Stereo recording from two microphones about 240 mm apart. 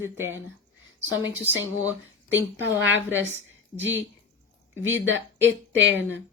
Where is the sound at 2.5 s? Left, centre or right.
Right.